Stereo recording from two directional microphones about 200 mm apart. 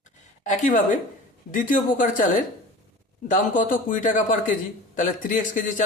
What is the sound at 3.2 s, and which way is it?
Speech, 40° left (ahead or behind).